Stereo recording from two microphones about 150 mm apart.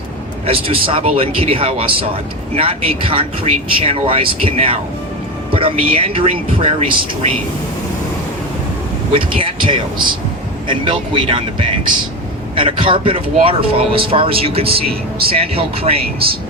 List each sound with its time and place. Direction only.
0.4 s speech: 40° right (ahead or behind)
9.1 s speech: 35° right (ahead or behind)